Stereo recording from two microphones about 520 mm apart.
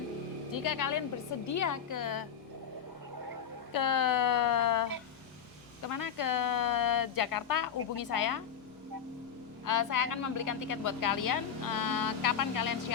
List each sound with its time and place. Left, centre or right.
0.5 s a woman's voice: left
3.7 s a woman's voice: left
5.9 s a woman's voice: left
9.6 s a woman's voice: left